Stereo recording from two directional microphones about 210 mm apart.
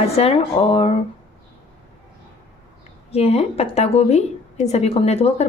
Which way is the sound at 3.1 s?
30° left (ahead or behind).